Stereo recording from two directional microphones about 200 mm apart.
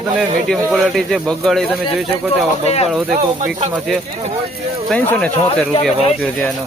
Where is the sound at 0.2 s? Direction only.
Centre (ahead or behind).